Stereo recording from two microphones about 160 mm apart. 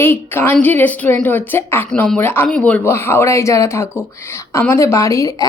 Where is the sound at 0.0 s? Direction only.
15° left (ahead or behind).